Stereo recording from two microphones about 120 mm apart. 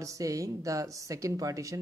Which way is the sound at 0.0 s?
30° right (ahead or behind).